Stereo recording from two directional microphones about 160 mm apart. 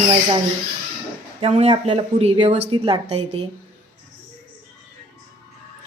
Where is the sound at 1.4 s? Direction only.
40° right (ahead or behind).